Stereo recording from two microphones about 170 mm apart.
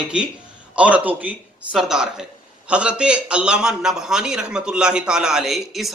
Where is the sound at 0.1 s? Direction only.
5° right (ahead or behind).